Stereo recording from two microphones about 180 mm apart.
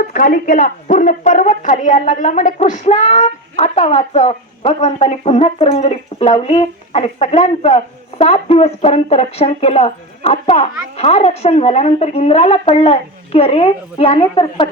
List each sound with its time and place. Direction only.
0.1 s a woman's voice: 50° left (ahead or behind); by 14.7 s 30° left (ahead or behind)